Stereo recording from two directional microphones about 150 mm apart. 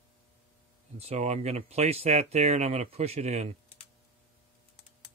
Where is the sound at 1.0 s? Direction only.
45° right (ahead or behind).